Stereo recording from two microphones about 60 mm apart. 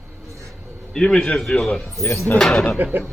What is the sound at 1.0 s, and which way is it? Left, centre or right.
Speech, centre.